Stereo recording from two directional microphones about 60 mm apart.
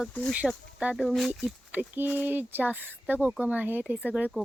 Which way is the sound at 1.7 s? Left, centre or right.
Right.